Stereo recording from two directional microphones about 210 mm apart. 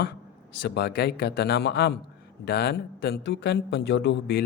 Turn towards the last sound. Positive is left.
turn(degrees=55)  # may be behind; listen again after turning